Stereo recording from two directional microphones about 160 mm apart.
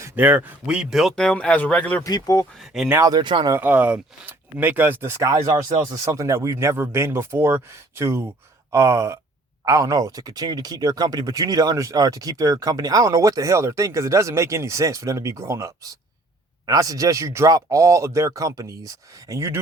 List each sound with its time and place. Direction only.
0.0 s speech: 10° right (ahead or behind); by 2.0 s 10° left (ahead or behind)
2.0 s speech: 25° left (ahead or behind)
2.6 s speech: centre (ahead or behind)
2.9 s speech: 25° right (ahead or behind)
3.5 s speech: 10° right (ahead or behind)